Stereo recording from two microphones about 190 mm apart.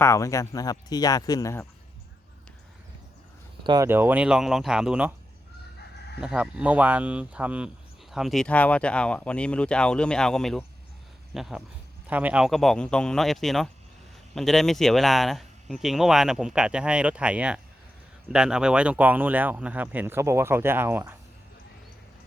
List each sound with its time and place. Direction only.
0.0 s speech: 15° left (ahead or behind)
3.6 s speech: 25° right (ahead or behind)
3.8 s speech: 10° right (ahead or behind)
6.1 s speech: 5° right (ahead or behind)